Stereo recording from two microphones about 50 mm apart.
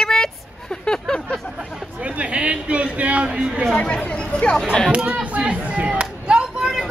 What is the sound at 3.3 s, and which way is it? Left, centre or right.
Speech, right.